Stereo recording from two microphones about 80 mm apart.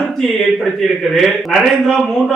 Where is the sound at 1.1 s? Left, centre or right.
Centre.